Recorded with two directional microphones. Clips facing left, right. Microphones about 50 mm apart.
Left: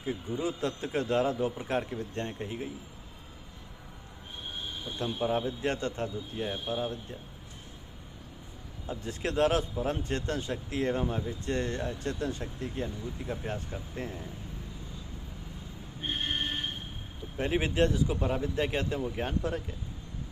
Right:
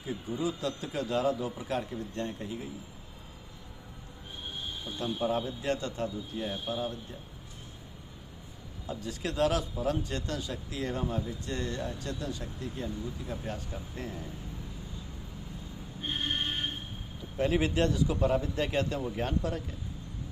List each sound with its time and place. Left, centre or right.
0.0 s speech: left
4.9 s speech: left
8.9 s speech: left
17.3 s speech: left